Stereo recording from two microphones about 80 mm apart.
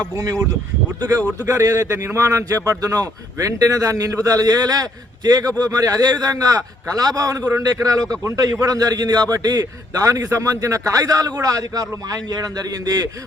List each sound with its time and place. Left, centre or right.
0.2 s a man's voice: right
1.5 s a man's voice: right